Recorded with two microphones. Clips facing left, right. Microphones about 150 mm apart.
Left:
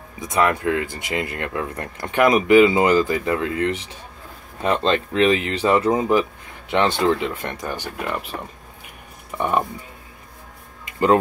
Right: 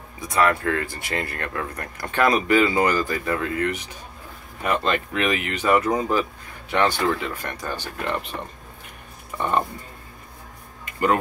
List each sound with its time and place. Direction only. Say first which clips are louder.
0.2 s speech: left 1 dB; 20° left (ahead or behind)
8.0 s speech: right 1 dB; 5° left (ahead or behind)
9.3 s speech: left 3 dB; 15° left (ahead or behind)
10.9 s a sound: left 4 dB; 25° left (ahead or behind)